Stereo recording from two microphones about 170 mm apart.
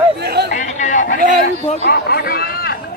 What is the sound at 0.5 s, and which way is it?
Chatter, 45° left (ahead or behind).